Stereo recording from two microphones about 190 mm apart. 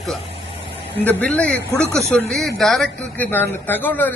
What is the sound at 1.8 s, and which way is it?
Speech, 15° right (ahead or behind).